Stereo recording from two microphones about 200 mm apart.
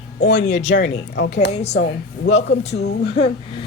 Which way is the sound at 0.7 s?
60° left (ahead or behind).